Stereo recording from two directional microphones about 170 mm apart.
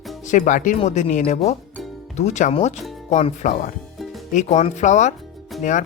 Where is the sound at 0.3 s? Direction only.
50° left (ahead or behind).